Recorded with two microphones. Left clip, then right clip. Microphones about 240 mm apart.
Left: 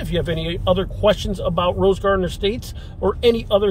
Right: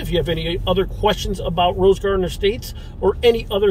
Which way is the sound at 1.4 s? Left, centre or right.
Centre.